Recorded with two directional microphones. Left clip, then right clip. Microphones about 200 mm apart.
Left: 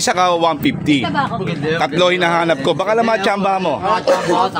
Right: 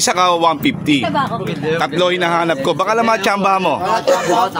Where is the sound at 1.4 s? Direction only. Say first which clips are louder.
Even; 30° left (ahead or behind).